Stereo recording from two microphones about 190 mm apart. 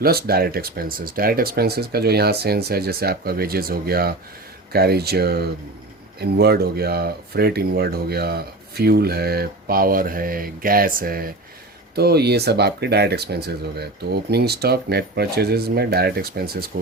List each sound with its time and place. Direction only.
0.0 s speech: 55° right (ahead or behind)